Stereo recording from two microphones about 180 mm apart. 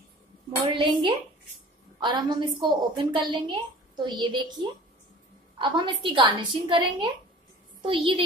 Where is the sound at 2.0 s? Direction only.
25° right (ahead or behind).